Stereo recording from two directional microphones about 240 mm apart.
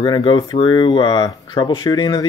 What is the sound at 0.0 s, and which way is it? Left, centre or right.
Speech, centre.